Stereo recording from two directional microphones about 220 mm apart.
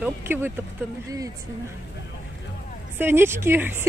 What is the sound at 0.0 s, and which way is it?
Speech, 10° right (ahead or behind).